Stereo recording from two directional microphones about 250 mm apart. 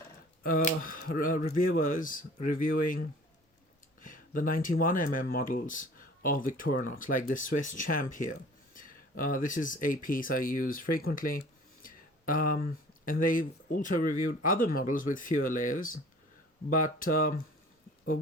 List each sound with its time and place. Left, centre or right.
0.4 s speech: left
4.0 s speech: left